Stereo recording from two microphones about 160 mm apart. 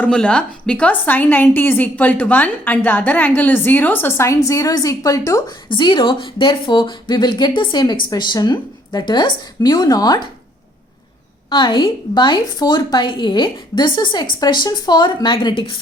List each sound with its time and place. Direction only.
0.0 s a woman's voice: 5° left (ahead or behind); by 10.2 s 25° left (ahead or behind)
11.4 s a woman's voice: 30° left (ahead or behind)